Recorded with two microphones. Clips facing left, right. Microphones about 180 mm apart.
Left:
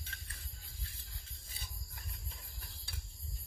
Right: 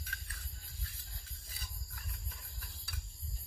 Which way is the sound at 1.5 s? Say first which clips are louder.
Even; 30° left (ahead or behind).